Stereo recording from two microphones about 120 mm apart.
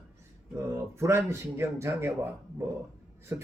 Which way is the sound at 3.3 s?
20° right (ahead or behind).